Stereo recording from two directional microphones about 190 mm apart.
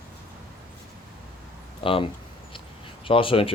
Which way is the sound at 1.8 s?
30° left (ahead or behind).